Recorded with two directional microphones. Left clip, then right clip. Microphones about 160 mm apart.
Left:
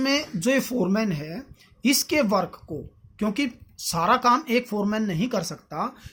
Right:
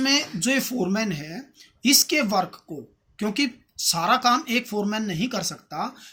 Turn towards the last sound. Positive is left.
turn(degrees=45)  # may be behind; listen again after turning